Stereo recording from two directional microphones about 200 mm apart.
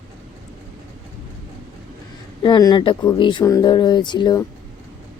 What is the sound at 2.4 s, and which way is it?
Speech, 20° left (ahead or behind).